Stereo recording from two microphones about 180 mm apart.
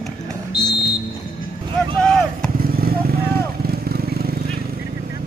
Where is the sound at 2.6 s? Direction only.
55° right (ahead or behind).